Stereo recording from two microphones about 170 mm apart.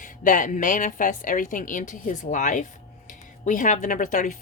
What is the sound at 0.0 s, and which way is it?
A woman's voice, 50° left (ahead or behind).